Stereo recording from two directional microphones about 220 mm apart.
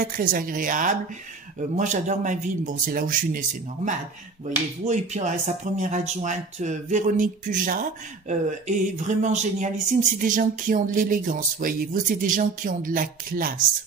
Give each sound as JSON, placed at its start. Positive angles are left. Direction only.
{"t": 0.0, "sound": "speech", "side_deg": -40}